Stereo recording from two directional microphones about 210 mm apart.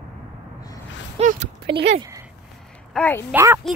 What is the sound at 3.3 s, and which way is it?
Speech, 10° right (ahead or behind).